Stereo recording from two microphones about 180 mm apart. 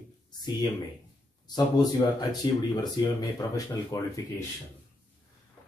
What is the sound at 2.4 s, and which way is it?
Speech, 25° left (ahead or behind).